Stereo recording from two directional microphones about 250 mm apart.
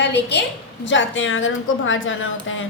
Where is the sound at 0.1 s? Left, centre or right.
Left.